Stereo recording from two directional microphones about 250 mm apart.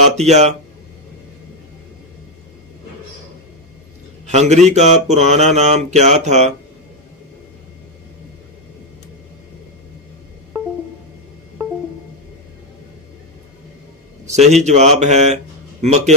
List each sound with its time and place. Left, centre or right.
0.2 s mantra: right
4.3 s mantra: right
14.2 s mantra: right